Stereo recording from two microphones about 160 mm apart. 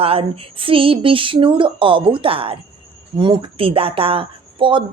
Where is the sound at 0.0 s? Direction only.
35° right (ahead or behind).